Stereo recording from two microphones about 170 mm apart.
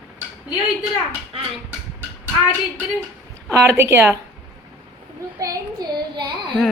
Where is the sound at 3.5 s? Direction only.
15° right (ahead or behind).